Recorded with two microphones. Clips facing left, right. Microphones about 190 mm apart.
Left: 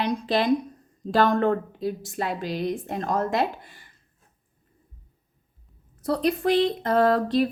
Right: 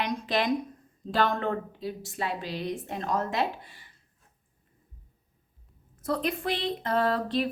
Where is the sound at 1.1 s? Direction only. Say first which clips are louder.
Left 6 dB; 45° left (ahead or behind).